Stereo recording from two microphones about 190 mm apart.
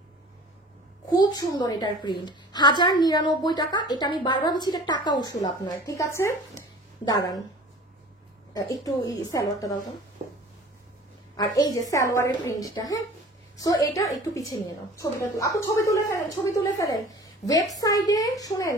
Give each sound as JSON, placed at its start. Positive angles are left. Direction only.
{"t": 1.1, "sound": "a woman's voice", "side_deg": 20}
{"t": 8.5, "sound": "a woman's voice", "side_deg": 20}
{"t": 11.3, "sound": "a woman's voice", "side_deg": 20}